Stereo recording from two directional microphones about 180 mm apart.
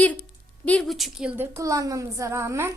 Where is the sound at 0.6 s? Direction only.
5° left (ahead or behind).